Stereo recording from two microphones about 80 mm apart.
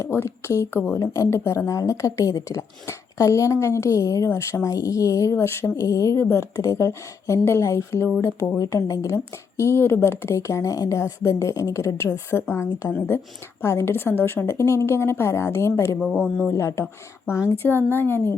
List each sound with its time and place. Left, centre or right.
0.0 s speech: left
0.9 s speech: left
6.1 s a woman's voice: left
6.6 s a woman's voice: left